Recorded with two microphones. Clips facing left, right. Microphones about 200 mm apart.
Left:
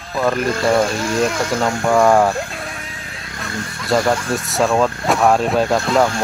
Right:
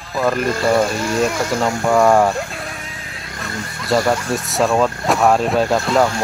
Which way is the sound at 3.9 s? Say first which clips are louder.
Even; centre (ahead or behind).